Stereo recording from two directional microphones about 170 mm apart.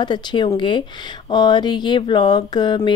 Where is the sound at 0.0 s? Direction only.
25° left (ahead or behind).